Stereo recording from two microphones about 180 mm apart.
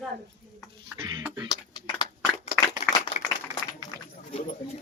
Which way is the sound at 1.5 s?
25° left (ahead or behind).